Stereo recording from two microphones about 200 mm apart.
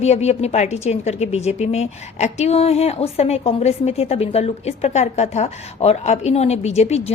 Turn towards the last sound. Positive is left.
turn(degrees=30)  # may be behind; listen again after turning